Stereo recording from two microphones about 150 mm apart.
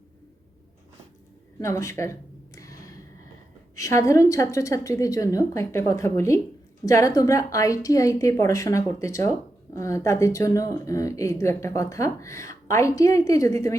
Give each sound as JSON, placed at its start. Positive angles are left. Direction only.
{"t": 1.5, "sound": "speech", "side_deg": 20}
{"t": 2.6, "sound": "a sound", "side_deg": 20}
{"t": 3.8, "sound": "speech", "side_deg": 20}